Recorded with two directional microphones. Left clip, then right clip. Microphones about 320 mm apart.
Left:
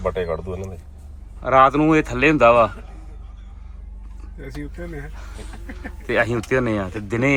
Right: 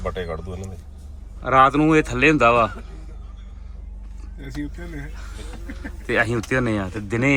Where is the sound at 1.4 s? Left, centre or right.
Centre.